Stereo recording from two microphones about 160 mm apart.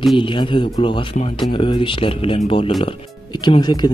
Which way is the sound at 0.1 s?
30° left (ahead or behind).